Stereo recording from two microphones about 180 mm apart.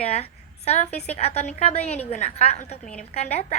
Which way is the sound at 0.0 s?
35° left (ahead or behind).